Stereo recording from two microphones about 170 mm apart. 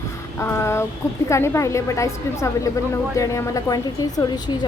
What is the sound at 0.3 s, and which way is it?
A woman's voice, 15° left (ahead or behind).